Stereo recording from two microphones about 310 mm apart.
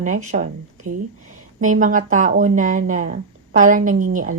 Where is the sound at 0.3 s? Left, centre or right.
Right.